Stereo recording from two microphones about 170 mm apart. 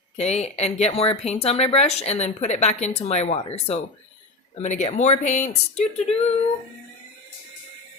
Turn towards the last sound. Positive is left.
turn(degrees=40)  # may be behind; listen again after turning